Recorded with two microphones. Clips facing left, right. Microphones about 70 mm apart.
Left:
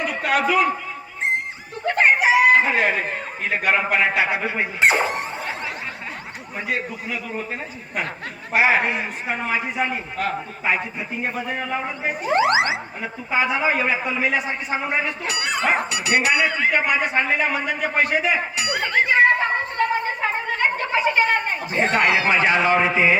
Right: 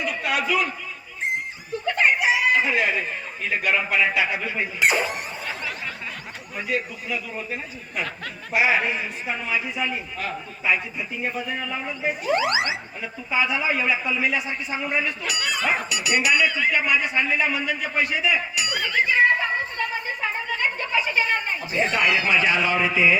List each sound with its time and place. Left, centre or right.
0.0 s a man's voice: left
1.9 s chicken: left
3.9 s speech: left
6.7 s a man's voice: left